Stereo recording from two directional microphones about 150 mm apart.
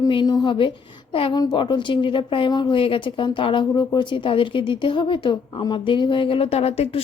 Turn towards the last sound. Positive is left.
turn(degrees=40)  # may be behind; listen again after turning